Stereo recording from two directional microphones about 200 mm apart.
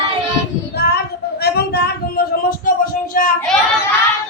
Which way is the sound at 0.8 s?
55° left (ahead or behind).